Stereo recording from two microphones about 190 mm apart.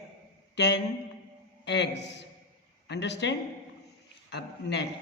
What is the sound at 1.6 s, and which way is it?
A man's voice, 65° left (ahead or behind).